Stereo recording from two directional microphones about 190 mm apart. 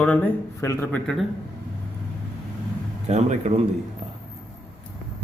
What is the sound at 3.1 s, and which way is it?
Speech, 35° right (ahead or behind).